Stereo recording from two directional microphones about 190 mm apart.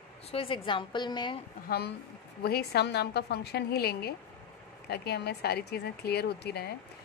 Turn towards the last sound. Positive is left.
turn(degrees=60)  # may be behind; listen again after turning